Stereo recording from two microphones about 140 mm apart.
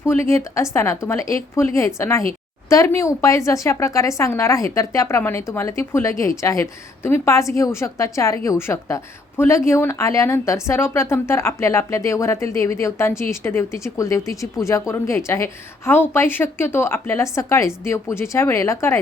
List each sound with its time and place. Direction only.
0.1 s speech: 20° left (ahead or behind)